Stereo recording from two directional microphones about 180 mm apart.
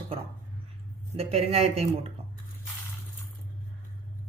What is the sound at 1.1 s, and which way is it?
Speech, 35° right (ahead or behind).